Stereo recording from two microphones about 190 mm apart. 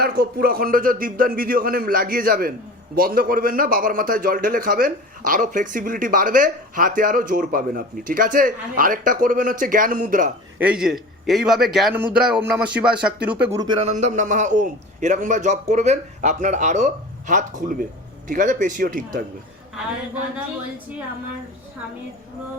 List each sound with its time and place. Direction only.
0.0 s a man's voice: 55° right (ahead or behind)
10.6 s a man's voice: 5° right (ahead or behind)
13.8 s a man's voice: 40° right (ahead or behind)